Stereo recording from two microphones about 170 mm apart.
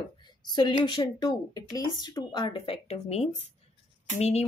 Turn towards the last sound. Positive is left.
turn(degrees=40)  # may be behind; listen again after turning